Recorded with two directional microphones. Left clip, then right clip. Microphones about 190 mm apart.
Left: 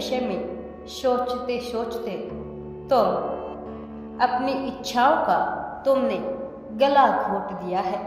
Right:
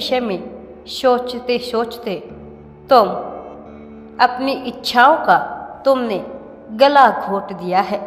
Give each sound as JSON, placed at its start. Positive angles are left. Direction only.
{"t": 0.0, "sound": "a woman's voice", "side_deg": -20}
{"t": 4.2, "sound": "a woman's voice", "side_deg": -20}